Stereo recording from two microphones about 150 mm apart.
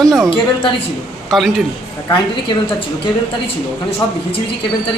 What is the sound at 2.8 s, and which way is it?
Speech, 40° left (ahead or behind).